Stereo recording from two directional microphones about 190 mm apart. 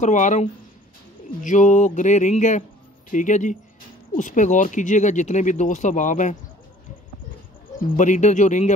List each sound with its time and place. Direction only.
0.0 s speech: 40° left (ahead or behind)
7.9 s speech: 40° left (ahead or behind)